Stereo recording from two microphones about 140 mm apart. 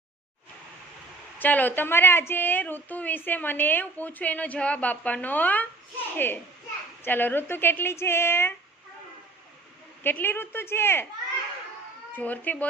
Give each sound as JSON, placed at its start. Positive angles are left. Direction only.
{"t": 1.4, "sound": "a woman's voice", "side_deg": 10}
{"t": 10.0, "sound": "a woman's voice", "side_deg": 15}
{"t": 12.1, "sound": "a woman's voice", "side_deg": 10}